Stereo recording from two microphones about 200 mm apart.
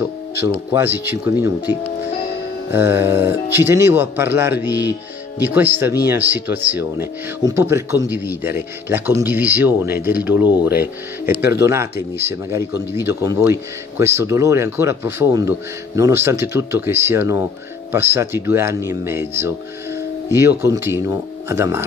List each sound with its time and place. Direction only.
0.7 s speech: 10° right (ahead or behind)
2.7 s speech: 10° right (ahead or behind)